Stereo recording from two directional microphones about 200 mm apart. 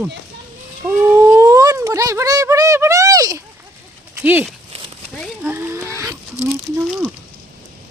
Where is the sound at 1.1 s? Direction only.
15° right (ahead or behind).